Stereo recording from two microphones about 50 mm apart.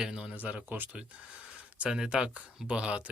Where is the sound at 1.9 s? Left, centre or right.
Centre.